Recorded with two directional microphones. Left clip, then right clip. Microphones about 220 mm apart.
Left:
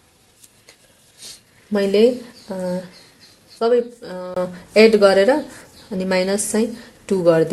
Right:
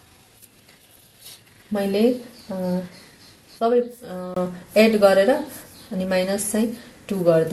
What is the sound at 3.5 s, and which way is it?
Speech, 45° left (ahead or behind).